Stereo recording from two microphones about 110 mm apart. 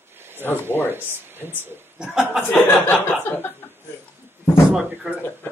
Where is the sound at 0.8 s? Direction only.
20° right (ahead or behind).